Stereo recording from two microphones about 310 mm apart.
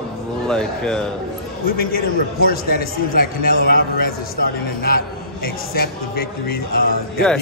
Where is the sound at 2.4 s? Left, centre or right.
Left.